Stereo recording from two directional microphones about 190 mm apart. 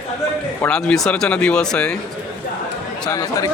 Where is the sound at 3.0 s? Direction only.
20° left (ahead or behind).